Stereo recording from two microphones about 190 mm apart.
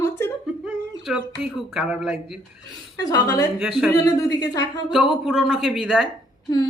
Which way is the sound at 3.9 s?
20° left (ahead or behind).